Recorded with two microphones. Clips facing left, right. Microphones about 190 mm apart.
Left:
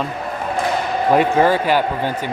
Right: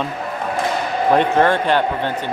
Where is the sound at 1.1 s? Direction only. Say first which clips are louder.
Left 1 dB; 5° left (ahead or behind).